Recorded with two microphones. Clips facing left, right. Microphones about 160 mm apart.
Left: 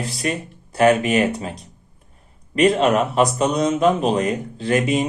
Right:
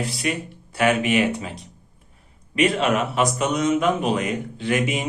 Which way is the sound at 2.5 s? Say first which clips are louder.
Left 4 dB; 35° left (ahead or behind).